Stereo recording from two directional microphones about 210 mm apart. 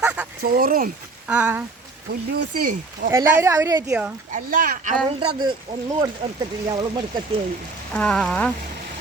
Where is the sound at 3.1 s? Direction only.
15° right (ahead or behind).